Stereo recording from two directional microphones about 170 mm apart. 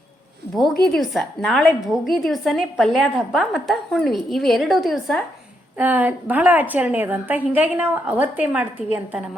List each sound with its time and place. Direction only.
0.5 s a woman's voice: centre (ahead or behind)
5.7 s a woman's voice: 10° right (ahead or behind)